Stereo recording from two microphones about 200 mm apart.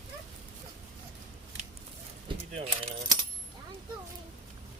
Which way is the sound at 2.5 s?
30° right (ahead or behind).